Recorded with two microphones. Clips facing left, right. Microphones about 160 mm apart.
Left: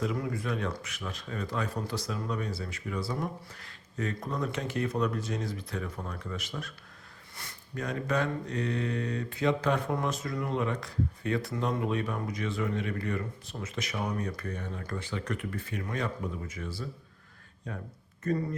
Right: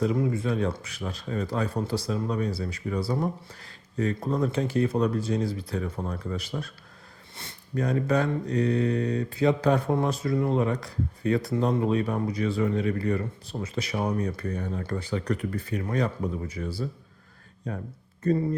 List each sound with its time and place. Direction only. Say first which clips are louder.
0.0 s mantra: right 7 dB; 30° right (ahead or behind)